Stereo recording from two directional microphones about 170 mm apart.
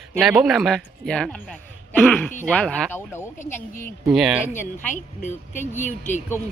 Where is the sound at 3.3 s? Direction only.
45° left (ahead or behind).